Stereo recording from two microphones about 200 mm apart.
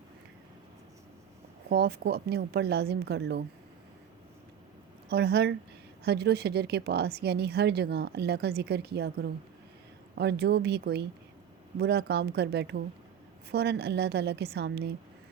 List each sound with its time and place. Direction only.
1.7 s a woman's voice: 55° right (ahead or behind)
5.0 s a woman's voice: 55° right (ahead or behind)